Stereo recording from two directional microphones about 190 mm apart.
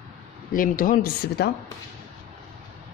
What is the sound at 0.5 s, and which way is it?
Speech, 45° left (ahead or behind).